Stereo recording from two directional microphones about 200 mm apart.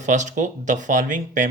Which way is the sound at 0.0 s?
40° right (ahead or behind).